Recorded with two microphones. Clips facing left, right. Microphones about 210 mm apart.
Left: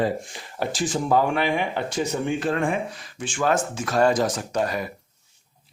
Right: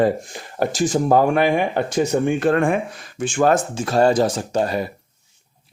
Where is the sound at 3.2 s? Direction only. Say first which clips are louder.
Right 6 dB; 45° right (ahead or behind).